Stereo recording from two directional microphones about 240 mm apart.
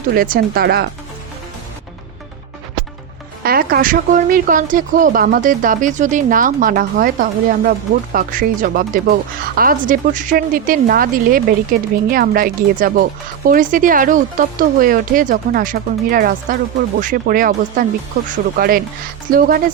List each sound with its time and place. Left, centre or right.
0.1 s speech: right
3.4 s speech: right